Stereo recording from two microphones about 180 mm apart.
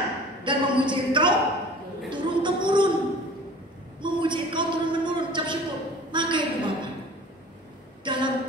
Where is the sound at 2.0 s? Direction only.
25° right (ahead or behind).